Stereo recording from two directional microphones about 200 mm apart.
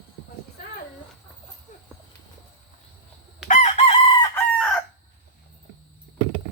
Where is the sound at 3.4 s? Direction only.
40° left (ahead or behind).